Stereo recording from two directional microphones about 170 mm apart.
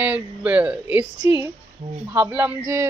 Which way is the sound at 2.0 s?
15° right (ahead or behind).